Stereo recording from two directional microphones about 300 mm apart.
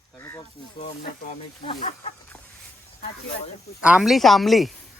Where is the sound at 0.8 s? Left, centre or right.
Left.